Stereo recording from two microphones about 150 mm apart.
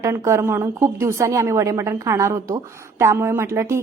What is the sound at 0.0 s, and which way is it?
A woman's voice, 20° right (ahead or behind).